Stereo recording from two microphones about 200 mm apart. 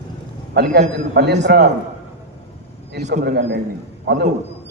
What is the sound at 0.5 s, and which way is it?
Speech, 55° right (ahead or behind).